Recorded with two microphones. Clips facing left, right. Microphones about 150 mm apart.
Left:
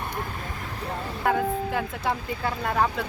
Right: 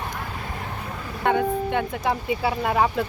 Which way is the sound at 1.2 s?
Centre (ahead or behind).